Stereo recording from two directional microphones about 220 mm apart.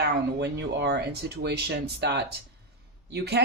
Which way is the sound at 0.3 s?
50° right (ahead or behind).